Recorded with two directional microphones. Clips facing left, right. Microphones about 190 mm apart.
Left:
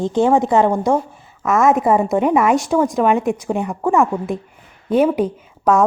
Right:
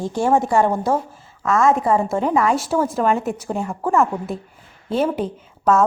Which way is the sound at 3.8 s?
Centre (ahead or behind).